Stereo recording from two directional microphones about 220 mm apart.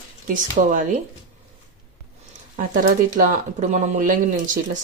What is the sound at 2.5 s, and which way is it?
Speech, 35° right (ahead or behind).